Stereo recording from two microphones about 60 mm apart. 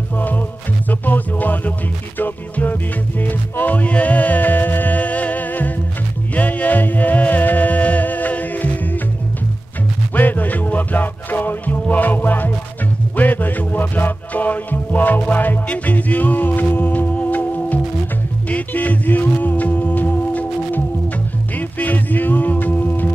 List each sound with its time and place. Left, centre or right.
0.8 s music: left
10.1 s music: left